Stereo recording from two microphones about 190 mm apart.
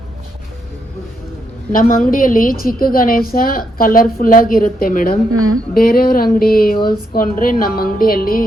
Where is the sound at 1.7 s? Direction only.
45° left (ahead or behind).